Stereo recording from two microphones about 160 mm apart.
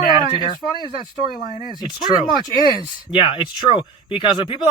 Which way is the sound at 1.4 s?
25° right (ahead or behind).